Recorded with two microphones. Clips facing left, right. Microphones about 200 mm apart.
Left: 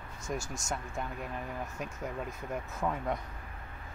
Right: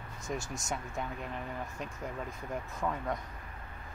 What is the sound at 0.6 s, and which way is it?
Speech, centre (ahead or behind).